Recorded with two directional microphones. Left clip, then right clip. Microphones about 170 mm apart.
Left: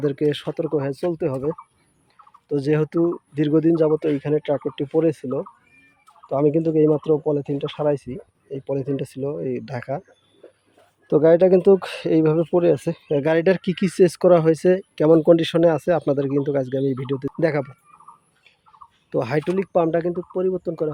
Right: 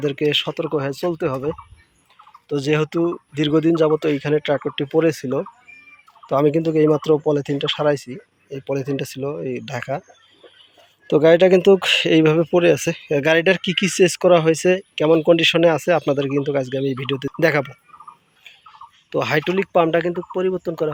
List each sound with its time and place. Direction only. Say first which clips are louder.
0.0 s speech: right 3 dB; 25° left (ahead or behind)
11.1 s speech: right 2 dB; 15° left (ahead or behind)
19.1 s speech: right 3 dB; 20° left (ahead or behind)